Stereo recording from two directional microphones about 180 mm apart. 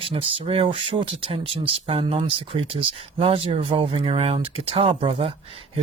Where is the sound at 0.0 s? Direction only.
30° right (ahead or behind).